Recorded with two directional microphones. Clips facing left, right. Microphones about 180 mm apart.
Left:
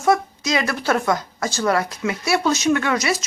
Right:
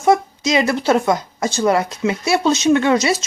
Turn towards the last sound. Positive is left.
turn(degrees=-25)  # may be behind; listen again after turning